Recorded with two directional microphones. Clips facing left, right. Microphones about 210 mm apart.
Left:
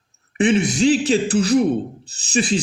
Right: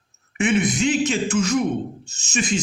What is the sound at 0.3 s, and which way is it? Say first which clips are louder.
Speech: left 3 dB; 30° left (ahead or behind).